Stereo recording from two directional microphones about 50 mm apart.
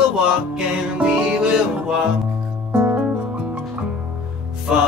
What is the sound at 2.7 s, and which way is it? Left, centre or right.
Music, right.